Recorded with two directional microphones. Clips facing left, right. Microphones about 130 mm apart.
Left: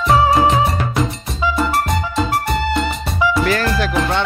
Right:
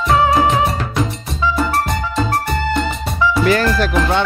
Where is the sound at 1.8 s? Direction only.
Centre (ahead or behind).